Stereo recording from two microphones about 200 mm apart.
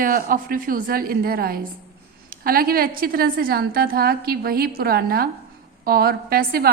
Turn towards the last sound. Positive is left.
turn(degrees=-50)  # may be behind; listen again after turning